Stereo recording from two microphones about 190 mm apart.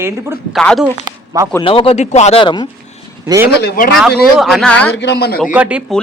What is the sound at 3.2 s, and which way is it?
Speech, 15° right (ahead or behind).